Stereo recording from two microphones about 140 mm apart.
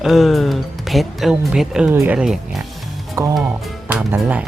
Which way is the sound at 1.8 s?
20° right (ahead or behind).